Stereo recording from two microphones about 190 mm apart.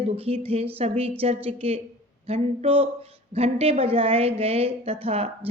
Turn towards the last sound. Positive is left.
turn(degrees=-30)  # may be behind; listen again after turning